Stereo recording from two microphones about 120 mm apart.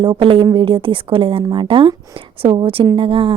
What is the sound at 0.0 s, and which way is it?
Speech, 40° right (ahead or behind).